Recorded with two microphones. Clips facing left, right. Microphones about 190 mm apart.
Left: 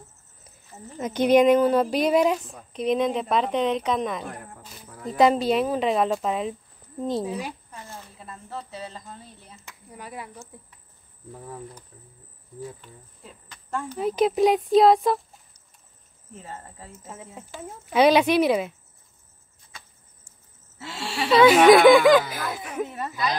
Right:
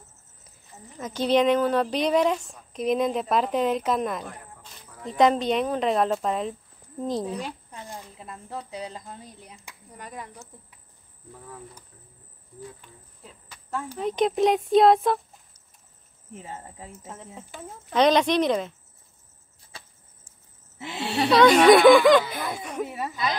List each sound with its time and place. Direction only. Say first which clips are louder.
0.9 s speech: left 4 dB; 15° left (ahead or behind)
7.7 s speech: right 2 dB; 15° right (ahead or behind)
9.8 s speech: left 1 dB; 10° left (ahead or behind)
13.2 s cricket: right 1 dB; centre (ahead or behind)
13.9 s speech: left 2 dB; 5° left (ahead or behind)
16.3 s speech: right 1 dB; 15° right (ahead or behind)
17.0 s speech: even; 5° left (ahead or behind)
19.7 s a sound: right 2 dB; 35° right (ahead or behind)
20.8 s speech: right 4 dB; 20° right (ahead or behind)
21.3 s speech: left 1 dB; 5° left (ahead or behind)
22.8 s speech: right 1 dB; 10° right (ahead or behind)